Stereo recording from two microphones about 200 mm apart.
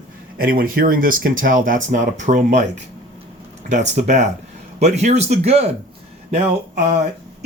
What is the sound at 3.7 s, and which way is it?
Speech, 35° right (ahead or behind).